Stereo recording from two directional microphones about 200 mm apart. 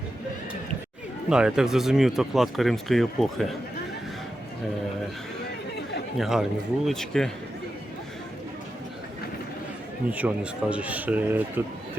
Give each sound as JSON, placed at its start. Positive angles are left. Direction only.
{"t": 1.3, "sound": "speech", "side_deg": -5}
{"t": 6.1, "sound": "speech", "side_deg": 0}
{"t": 10.1, "sound": "speech", "side_deg": -10}